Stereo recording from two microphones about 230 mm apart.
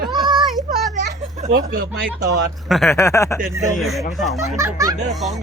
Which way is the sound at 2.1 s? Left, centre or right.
Centre.